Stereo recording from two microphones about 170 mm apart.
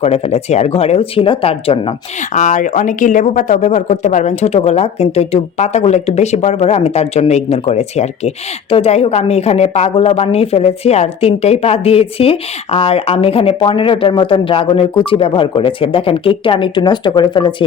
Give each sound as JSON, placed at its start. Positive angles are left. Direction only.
{"t": 0.0, "sound": "a woman's voice", "side_deg": 40}
{"t": 2.3, "sound": "a woman's voice", "side_deg": 45}